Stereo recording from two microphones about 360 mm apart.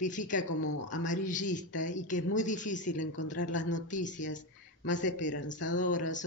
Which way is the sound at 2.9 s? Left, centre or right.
Left.